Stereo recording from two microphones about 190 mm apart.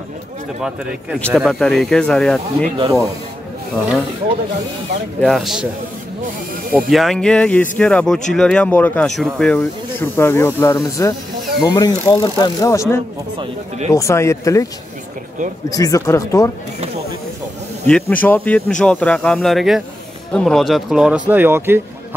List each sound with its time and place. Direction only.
0.6 s speech: centre (ahead or behind)
5.2 s speech: centre (ahead or behind)
6.7 s speech: centre (ahead or behind); by 12.8 s 15° left (ahead or behind)
13.9 s speech: 15° left (ahead or behind)
15.7 s speech: 15° left (ahead or behind)
17.8 s speech: 5° left (ahead or behind); by 21.8 s 10° right (ahead or behind)